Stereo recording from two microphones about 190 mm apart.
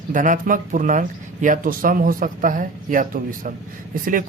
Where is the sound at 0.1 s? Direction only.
45° right (ahead or behind).